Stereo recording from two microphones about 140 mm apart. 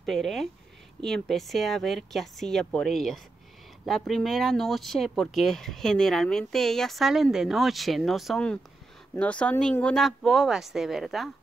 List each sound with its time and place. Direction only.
0.0 s speech: centre (ahead or behind)